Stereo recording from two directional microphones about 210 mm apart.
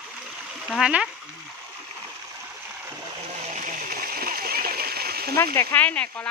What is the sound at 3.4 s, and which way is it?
Splash, 35° right (ahead or behind).